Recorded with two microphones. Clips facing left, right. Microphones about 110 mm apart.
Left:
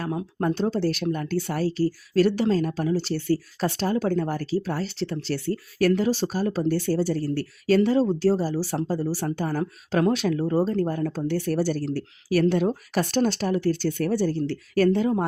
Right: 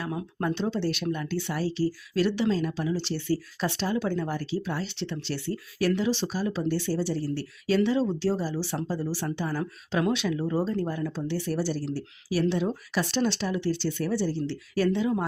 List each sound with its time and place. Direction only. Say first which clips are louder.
0.1 s speech: left 4 dB; 25° left (ahead or behind)
0.4 s speech: left 4 dB; 40° left (ahead or behind)